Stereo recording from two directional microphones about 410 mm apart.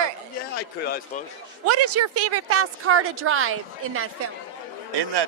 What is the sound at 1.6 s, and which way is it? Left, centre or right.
A woman's voice, right.